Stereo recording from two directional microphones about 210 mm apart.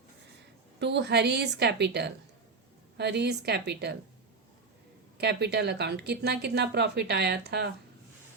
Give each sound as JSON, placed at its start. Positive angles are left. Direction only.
{"t": 0.8, "sound": "speech", "side_deg": -55}
{"t": 5.1, "sound": "speech", "side_deg": -50}